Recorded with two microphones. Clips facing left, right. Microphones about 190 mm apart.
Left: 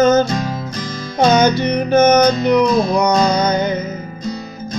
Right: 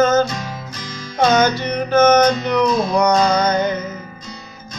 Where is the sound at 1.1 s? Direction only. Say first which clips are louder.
Left 2 dB; 15° left (ahead or behind).